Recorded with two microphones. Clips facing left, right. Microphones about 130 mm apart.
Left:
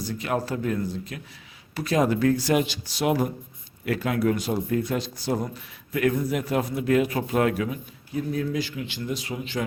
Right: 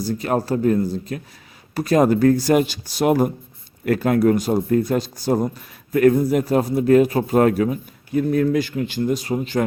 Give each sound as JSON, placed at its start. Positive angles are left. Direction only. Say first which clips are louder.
{"t": 0.0, "sound": "a man's voice", "louder": "right 6 dB", "side_deg": -40}
{"t": 8.1, "sound": "speech", "louder": "right 9 dB", "side_deg": -60}